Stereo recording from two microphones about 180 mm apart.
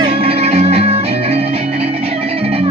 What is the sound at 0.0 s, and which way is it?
Music, 30° right (ahead or behind).